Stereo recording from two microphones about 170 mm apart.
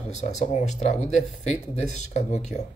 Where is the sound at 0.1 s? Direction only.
45° left (ahead or behind).